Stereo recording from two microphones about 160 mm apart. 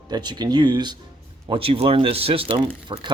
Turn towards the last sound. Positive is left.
turn(degrees=-35)  # may be behind; listen again after turning